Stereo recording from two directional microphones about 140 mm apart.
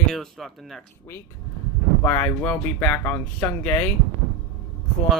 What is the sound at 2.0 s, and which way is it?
Speech, 15° left (ahead or behind).